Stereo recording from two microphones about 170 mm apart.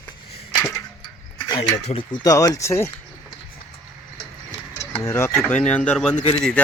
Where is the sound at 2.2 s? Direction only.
20° left (ahead or behind).